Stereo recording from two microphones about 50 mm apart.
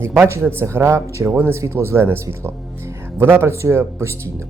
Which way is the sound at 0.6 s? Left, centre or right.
Right.